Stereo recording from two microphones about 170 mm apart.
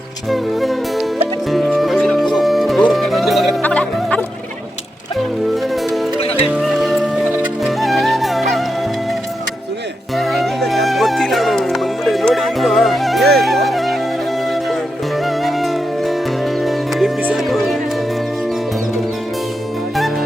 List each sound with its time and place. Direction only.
0.3 s music: centre (ahead or behind)
6.1 s music: 35° left (ahead or behind)
6.5 s music: centre (ahead or behind)
10.2 s music: centre (ahead or behind)
15.2 s music: centre (ahead or behind)